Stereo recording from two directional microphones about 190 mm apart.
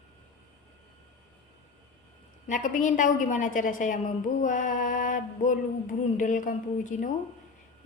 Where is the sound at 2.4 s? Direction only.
40° left (ahead or behind).